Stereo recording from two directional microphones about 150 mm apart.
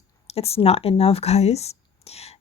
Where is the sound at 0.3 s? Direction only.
40° left (ahead or behind).